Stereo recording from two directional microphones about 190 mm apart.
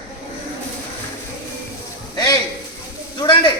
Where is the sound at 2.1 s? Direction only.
20° left (ahead or behind).